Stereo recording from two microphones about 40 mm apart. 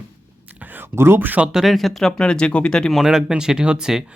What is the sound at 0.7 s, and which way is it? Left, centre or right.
Speech, right.